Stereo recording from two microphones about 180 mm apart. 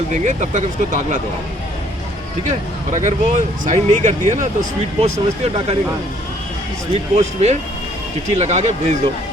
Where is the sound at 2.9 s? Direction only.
45° right (ahead or behind).